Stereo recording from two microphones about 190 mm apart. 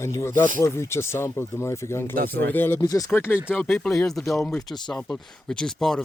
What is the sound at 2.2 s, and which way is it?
Speech, 55° right (ahead or behind).